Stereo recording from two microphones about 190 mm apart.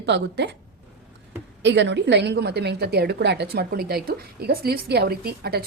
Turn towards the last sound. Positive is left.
turn(degrees=-55)  # may be behind; listen again after turning